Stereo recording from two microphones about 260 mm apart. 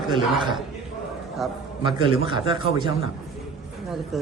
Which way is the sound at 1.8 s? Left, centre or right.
Centre.